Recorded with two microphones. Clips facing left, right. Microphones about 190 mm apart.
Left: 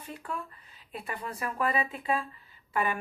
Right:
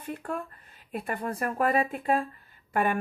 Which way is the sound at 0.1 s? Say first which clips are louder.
Right 5 dB; 55° right (ahead or behind).